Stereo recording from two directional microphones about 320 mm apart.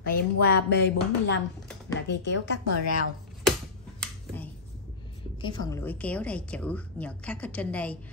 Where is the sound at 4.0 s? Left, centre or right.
Centre.